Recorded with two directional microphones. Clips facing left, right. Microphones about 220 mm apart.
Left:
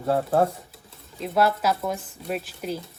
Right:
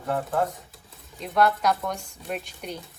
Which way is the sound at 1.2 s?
5° left (ahead or behind).